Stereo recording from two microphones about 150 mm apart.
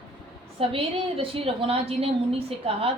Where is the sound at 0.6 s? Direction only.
40° right (ahead or behind).